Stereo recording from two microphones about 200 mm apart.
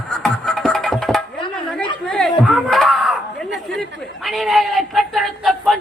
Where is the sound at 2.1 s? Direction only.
Centre (ahead or behind).